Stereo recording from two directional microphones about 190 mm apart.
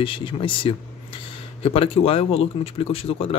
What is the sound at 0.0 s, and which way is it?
Speech, 25° left (ahead or behind).